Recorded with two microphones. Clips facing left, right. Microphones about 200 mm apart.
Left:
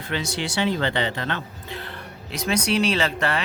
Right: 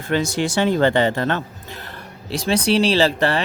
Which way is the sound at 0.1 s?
45° right (ahead or behind).